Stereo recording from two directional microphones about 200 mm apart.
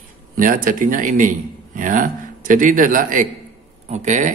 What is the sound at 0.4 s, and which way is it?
Speech, 40° right (ahead or behind).